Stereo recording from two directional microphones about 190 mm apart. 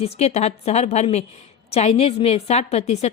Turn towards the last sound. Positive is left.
turn(degrees=35)  # may be behind; listen again after turning